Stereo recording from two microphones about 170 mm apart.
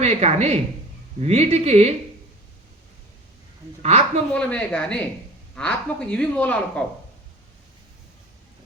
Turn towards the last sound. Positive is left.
turn(degrees=5)  # may be behind; listen again after turning